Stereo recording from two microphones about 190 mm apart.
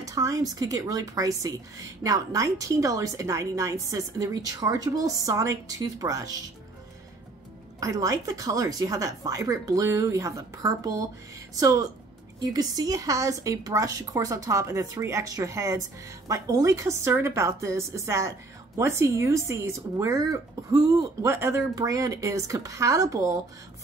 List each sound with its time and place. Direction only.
0.0 s speech: 15° right (ahead or behind)
7.8 s speech: 15° right (ahead or behind)